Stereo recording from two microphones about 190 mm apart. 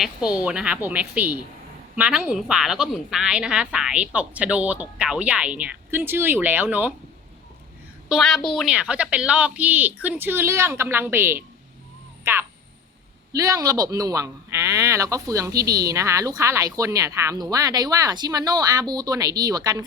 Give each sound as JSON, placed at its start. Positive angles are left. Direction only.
{"t": 0.0, "sound": "speech", "side_deg": -5}
{"t": 8.1, "sound": "speech", "side_deg": 0}